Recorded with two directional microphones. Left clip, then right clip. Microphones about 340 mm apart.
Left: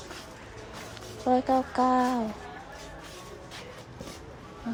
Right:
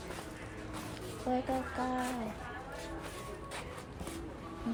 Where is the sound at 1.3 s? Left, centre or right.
Centre.